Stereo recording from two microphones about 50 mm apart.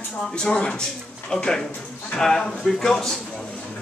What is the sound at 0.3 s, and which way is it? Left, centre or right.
Speech, centre.